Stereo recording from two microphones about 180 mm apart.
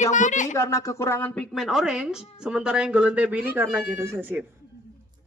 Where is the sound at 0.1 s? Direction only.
45° left (ahead or behind).